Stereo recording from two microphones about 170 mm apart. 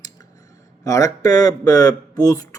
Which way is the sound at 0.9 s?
20° left (ahead or behind).